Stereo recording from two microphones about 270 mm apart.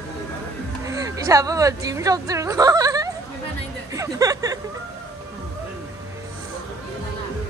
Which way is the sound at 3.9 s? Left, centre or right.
Centre.